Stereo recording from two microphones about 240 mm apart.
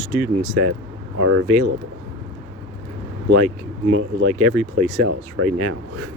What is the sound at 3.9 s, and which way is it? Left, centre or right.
Speech, right.